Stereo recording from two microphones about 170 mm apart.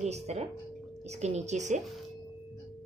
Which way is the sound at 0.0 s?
40° right (ahead or behind).